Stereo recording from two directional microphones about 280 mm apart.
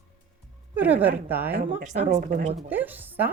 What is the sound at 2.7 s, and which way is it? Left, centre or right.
Speech, centre.